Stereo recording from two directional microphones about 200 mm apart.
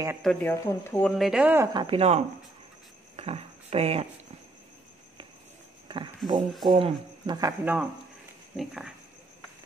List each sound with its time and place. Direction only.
0.2 s speech: 5° left (ahead or behind)
1.7 s speech: 25° right (ahead or behind)
5.9 s speech: 25° right (ahead or behind)
7.6 s speech: 5° right (ahead or behind)